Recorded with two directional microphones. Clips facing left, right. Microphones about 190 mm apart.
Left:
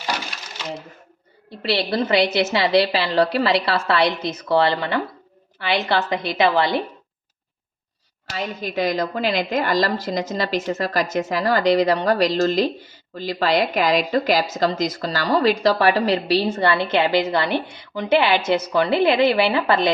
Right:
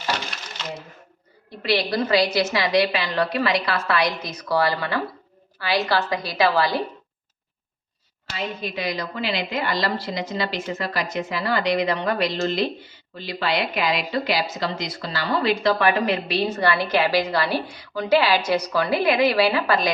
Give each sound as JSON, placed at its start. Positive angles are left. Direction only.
{"t": 1.6, "sound": "a woman's voice", "side_deg": 30}
{"t": 8.7, "sound": "a woman's voice", "side_deg": 45}